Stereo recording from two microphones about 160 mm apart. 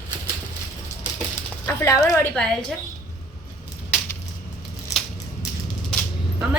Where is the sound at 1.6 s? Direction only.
20° left (ahead or behind).